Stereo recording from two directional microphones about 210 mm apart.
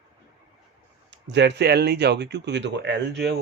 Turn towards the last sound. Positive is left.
turn(degrees=-55)  # may be behind; listen again after turning